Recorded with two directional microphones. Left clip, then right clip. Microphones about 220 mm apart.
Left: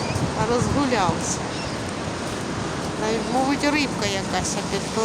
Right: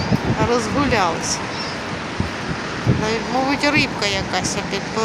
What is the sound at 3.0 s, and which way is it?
Speech, centre (ahead or behind).